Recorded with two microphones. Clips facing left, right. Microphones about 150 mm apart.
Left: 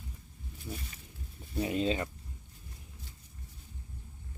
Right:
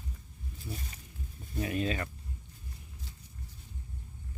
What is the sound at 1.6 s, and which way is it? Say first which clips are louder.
Speech: left 2 dB; 25° left (ahead or behind).